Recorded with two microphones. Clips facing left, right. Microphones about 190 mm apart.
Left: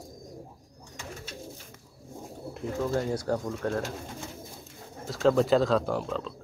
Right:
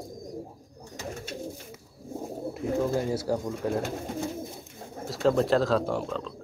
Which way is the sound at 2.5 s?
10° right (ahead or behind).